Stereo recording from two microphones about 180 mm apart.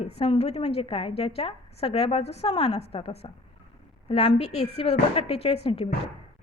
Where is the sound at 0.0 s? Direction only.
35° left (ahead or behind).